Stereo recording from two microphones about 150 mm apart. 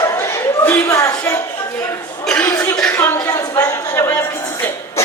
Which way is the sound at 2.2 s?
10° left (ahead or behind).